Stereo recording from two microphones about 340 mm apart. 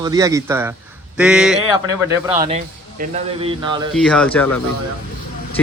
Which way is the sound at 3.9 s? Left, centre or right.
Centre.